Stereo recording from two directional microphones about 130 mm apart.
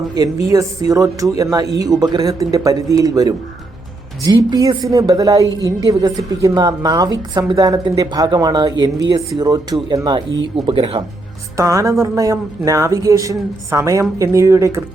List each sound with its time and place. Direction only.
0.1 s a woman's voice: 25° right (ahead or behind)
10.2 s speech: 40° right (ahead or behind)
11.5 s a woman's voice: 25° right (ahead or behind)